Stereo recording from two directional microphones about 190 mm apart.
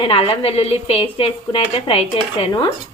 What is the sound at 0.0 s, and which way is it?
A woman's voice, 30° left (ahead or behind).